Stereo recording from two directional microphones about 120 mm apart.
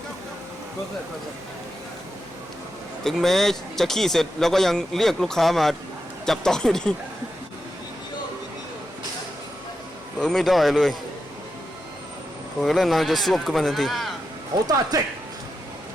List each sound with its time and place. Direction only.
3.0 s speech: 5° left (ahead or behind)
10.2 s speech: centre (ahead or behind)
12.6 s speech: centre (ahead or behind)
14.7 s speech: 30° right (ahead or behind)